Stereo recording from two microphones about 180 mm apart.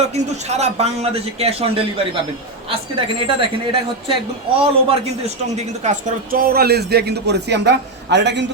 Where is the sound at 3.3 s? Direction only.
30° right (ahead or behind).